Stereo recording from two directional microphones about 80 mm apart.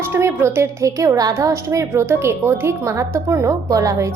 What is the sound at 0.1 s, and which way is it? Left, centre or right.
A woman's voice, right.